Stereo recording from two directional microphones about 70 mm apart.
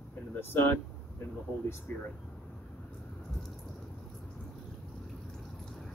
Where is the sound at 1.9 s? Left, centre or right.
Left.